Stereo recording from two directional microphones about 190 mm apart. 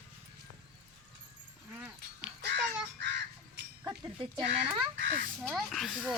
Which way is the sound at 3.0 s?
70° right (ahead or behind).